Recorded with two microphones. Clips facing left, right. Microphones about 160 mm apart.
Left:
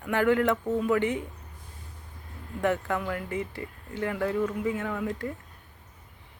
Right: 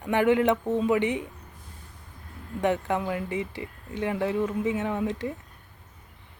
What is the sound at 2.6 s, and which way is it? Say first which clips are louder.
Speech: right 2 dB; 20° right (ahead or behind).